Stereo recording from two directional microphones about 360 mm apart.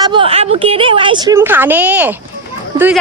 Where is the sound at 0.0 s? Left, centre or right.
Centre.